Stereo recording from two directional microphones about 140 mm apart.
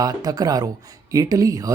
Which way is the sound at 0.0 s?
25° right (ahead or behind).